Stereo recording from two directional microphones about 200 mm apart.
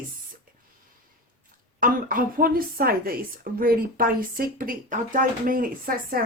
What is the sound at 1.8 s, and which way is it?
A woman's voice, 45° right (ahead or behind).